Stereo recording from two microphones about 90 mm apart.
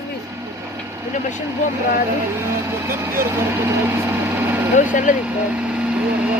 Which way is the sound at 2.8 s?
30° right (ahead or behind).